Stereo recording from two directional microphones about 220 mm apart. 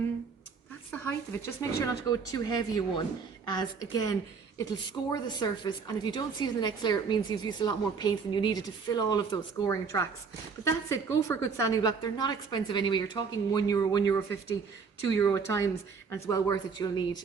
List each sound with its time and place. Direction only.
0.9 s a woman's voice: 10° left (ahead or behind)